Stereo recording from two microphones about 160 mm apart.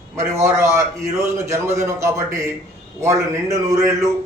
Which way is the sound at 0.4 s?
15° right (ahead or behind).